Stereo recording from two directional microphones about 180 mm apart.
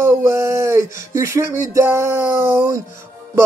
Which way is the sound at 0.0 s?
15° right (ahead or behind).